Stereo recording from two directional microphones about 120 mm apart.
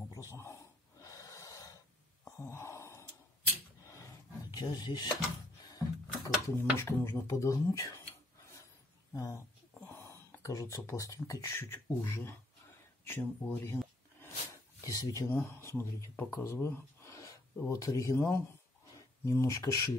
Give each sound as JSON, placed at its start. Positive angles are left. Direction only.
{"t": 0.1, "sound": "snort", "side_deg": 25}
{"t": 2.2, "sound": "gasp", "side_deg": 25}
{"t": 3.8, "sound": "a sound", "side_deg": 25}
{"t": 5.7, "sound": "speech", "side_deg": 30}
{"t": 9.1, "sound": "speech", "side_deg": 30}
{"t": 9.8, "sound": "a sound", "side_deg": 20}
{"t": 10.8, "sound": "speech", "side_deg": 25}
{"t": 14.8, "sound": "speech", "side_deg": 30}